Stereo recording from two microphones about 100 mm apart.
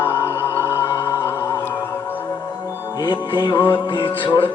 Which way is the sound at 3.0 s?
50° left (ahead or behind).